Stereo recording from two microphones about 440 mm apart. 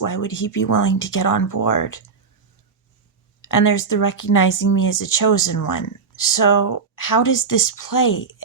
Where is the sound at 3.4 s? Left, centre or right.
Left.